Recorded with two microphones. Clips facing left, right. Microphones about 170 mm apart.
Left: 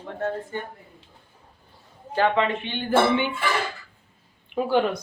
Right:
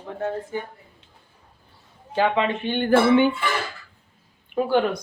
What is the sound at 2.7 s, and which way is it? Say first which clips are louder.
Music: right 6 dB; 50° right (ahead or behind).